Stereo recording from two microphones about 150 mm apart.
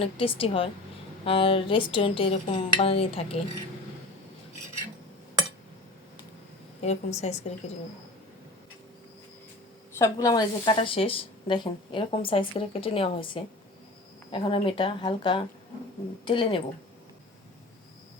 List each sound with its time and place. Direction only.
0.0 s a woman's voice: 40° left (ahead or behind)
6.8 s a woman's voice: 50° left (ahead or behind)
10.0 s speech: 25° left (ahead or behind)
10.8 s a woman's voice: 40° left (ahead or behind)